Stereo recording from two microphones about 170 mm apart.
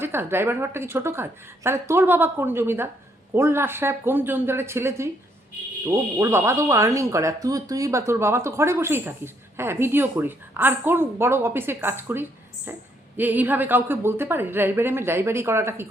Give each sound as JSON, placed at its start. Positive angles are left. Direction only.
{"t": 0.0, "sound": "speech", "side_deg": -15}